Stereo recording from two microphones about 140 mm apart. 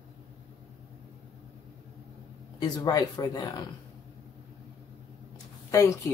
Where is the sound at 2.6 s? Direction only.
30° left (ahead or behind).